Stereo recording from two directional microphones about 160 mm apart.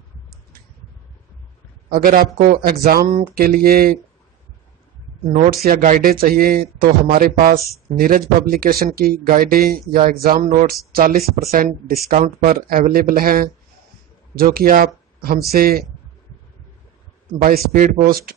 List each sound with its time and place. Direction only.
1.9 s speech: 65° right (ahead or behind)
5.5 s speech: 65° right (ahead or behind)
10.9 s speech: 65° right (ahead or behind)
17.4 s speech: 65° right (ahead or behind)